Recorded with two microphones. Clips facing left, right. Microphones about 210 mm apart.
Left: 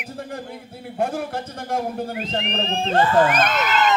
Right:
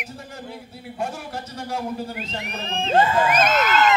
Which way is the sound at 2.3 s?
55° left (ahead or behind).